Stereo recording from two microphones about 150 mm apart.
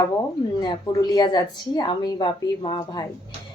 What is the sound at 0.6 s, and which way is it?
Speech, 30° left (ahead or behind).